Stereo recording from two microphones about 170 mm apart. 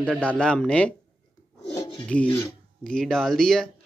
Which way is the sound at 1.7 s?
20° left (ahead or behind).